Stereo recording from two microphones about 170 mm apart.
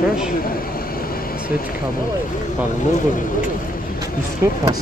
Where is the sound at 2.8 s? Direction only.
50° left (ahead or behind).